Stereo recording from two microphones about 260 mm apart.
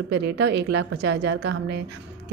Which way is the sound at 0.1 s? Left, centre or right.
Right.